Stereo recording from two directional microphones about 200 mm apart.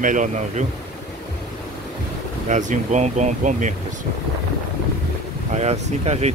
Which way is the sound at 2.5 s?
40° right (ahead or behind).